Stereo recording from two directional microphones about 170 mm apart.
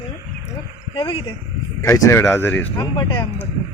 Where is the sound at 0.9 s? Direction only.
30° left (ahead or behind).